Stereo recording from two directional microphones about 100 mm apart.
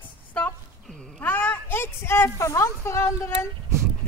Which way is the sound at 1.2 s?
20° left (ahead or behind).